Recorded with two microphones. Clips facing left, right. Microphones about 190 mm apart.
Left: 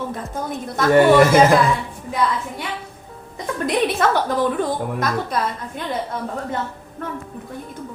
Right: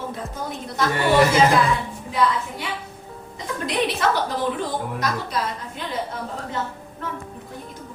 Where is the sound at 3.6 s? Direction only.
50° left (ahead or behind).